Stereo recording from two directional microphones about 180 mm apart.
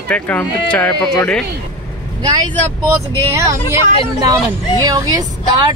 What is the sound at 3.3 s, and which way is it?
Speech, 15° right (ahead or behind).